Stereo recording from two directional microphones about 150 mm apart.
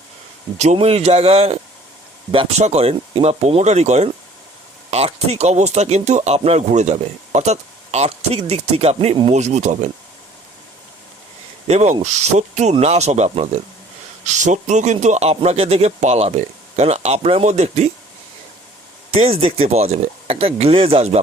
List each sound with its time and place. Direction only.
0.6 s speech: 45° right (ahead or behind)
11.7 s speech: 50° right (ahead or behind)
19.1 s speech: 40° right (ahead or behind)